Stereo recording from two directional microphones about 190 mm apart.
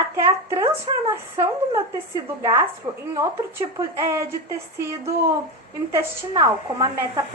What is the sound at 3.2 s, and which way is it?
A woman's voice, 15° right (ahead or behind).